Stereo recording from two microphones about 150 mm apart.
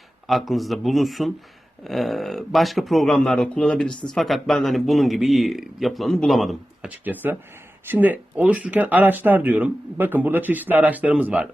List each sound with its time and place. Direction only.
0.3 s speech: centre (ahead or behind)
7.0 s speech: 10° right (ahead or behind)